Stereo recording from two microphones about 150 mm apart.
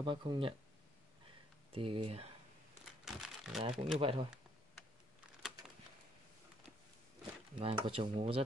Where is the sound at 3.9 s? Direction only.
35° right (ahead or behind).